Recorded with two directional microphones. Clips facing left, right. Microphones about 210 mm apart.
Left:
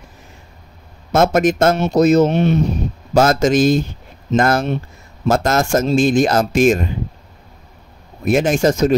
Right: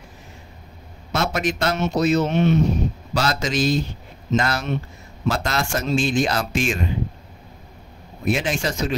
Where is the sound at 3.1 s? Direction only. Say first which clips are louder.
Left 10 dB; 50° left (ahead or behind).